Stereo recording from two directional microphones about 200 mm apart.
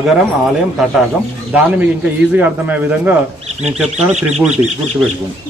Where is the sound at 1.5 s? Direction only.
5° right (ahead or behind).